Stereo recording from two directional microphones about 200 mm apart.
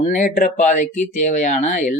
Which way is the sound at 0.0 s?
40° left (ahead or behind).